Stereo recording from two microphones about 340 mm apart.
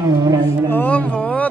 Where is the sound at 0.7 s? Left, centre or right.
Centre.